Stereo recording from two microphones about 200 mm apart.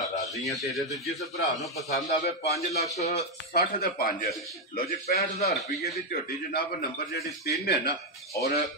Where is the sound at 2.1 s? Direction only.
30° left (ahead or behind).